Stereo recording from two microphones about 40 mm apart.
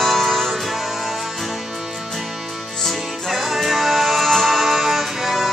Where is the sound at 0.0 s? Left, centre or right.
Centre.